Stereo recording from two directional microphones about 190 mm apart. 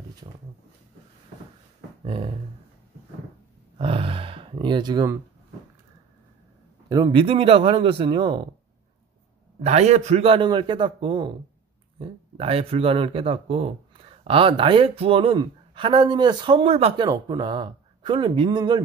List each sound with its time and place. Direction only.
2.0 s a sound: 30° right (ahead or behind)
3.7 s gasp: 30° right (ahead or behind)
6.9 s speech: 25° right (ahead or behind)
9.6 s speech: 35° right (ahead or behind)